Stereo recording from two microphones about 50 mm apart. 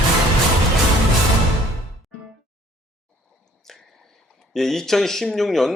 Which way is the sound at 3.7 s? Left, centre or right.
Centre.